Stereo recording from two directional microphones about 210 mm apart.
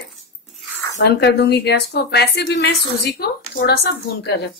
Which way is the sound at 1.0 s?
55° left (ahead or behind).